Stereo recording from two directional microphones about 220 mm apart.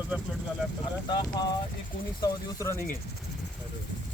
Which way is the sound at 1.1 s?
20° left (ahead or behind).